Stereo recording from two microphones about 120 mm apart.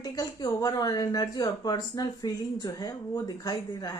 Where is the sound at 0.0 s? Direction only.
30° left (ahead or behind).